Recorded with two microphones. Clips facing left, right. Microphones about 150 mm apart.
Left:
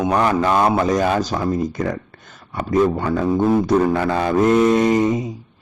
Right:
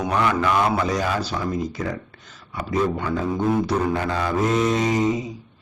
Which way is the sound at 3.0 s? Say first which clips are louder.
Left 5 dB; 50° left (ahead or behind).